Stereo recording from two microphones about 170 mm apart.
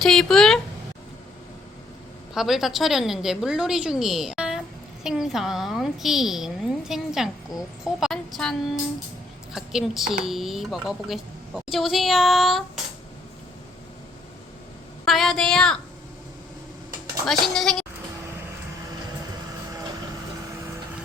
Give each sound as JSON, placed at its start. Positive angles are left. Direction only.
{"t": 0.0, "sound": "a woman's voice", "side_deg": 5}
{"t": 2.3, "sound": "a woman's voice", "side_deg": 0}
{"t": 9.6, "sound": "a woman's voice", "side_deg": 0}
{"t": 15.0, "sound": "a woman's voice", "side_deg": 0}
{"t": 17.4, "sound": "a woman's voice", "side_deg": 0}